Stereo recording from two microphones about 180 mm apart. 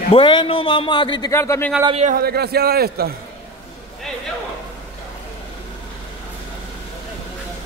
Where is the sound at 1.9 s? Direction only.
35° right (ahead or behind).